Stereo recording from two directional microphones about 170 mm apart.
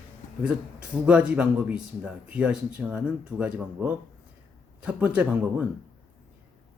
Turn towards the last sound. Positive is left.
turn(degrees=-10)  # may be behind; listen again after turning